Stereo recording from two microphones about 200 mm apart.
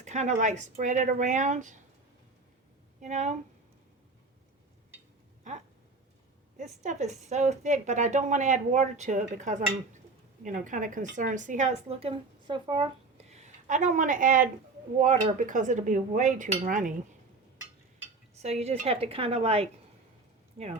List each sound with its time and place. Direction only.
0.0 s a woman's voice: 35° right (ahead or behind)
3.0 s a woman's voice: 35° right (ahead or behind)
5.4 s a sound: 35° right (ahead or behind)
6.8 s a woman's voice: 35° right (ahead or behind)
13.3 s a woman's voice: 35° right (ahead or behind)
18.4 s speech: 30° right (ahead or behind)